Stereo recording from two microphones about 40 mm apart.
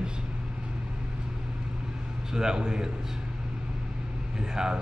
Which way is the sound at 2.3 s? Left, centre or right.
Centre.